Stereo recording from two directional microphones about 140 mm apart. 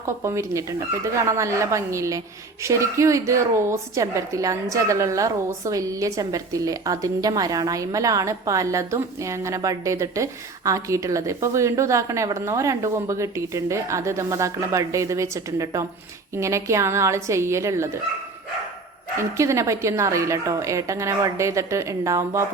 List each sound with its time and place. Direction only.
0.2 s speech: 20° right (ahead or behind)
19.4 s speech: 20° right (ahead or behind)